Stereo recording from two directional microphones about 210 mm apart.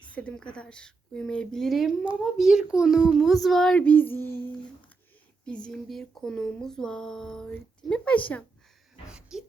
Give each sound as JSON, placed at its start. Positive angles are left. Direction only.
{"t": 0.1, "sound": "speech", "side_deg": 5}
{"t": 9.0, "sound": "speech", "side_deg": -5}